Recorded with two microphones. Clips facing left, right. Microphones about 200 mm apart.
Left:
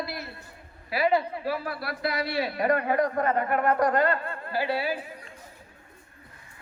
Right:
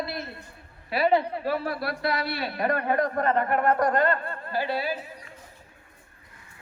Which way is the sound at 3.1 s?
45° right (ahead or behind).